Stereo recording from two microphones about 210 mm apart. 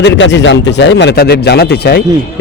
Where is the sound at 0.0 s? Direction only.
60° left (ahead or behind).